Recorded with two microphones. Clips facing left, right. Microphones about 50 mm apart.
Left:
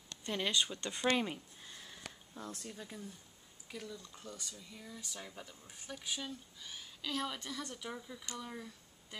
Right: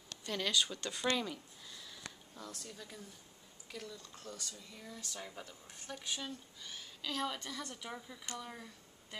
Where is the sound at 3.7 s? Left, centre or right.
Centre.